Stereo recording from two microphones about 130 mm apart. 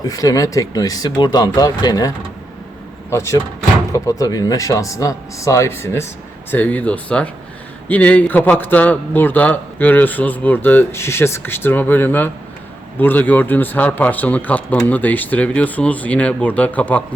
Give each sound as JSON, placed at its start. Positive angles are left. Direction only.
{"t": 0.0, "sound": "a man's voice", "side_deg": 25}